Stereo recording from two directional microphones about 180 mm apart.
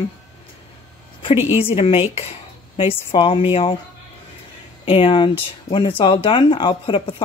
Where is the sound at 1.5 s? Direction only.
30° left (ahead or behind).